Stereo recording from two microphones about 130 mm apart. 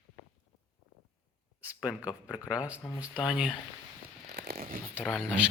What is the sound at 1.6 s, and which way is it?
Speech, 10° right (ahead or behind).